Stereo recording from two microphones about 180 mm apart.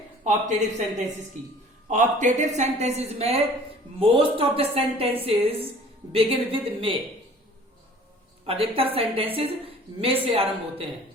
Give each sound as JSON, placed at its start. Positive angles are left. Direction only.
{"t": 0.3, "sound": "a woman's voice", "side_deg": -40}
{"t": 8.4, "sound": "a woman's voice", "side_deg": -30}